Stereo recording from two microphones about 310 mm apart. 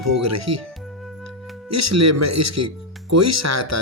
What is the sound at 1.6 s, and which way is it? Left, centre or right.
Speech, right.